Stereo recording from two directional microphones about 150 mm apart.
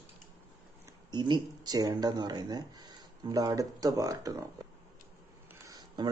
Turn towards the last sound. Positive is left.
turn(degrees=-30)  # may be behind; listen again after turning